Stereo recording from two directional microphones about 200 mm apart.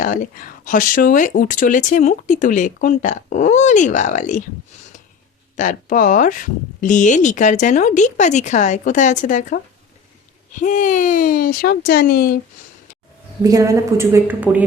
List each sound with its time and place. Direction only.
0.0 s speech: 40° left (ahead or behind)
5.5 s speech: 40° left (ahead or behind)
13.4 s a woman's voice: 15° right (ahead or behind)